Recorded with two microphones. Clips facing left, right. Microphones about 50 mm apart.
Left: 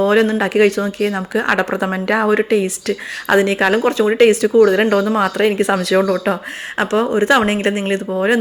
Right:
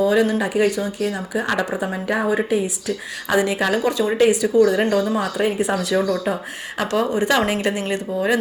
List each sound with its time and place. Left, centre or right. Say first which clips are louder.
0.0 s speech: left 4 dB; left
3.3 s a woman's voice: left 5 dB; left
6.7 s a woman's voice: left 5 dB; left